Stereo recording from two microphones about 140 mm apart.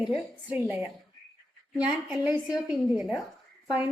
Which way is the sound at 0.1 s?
10° right (ahead or behind).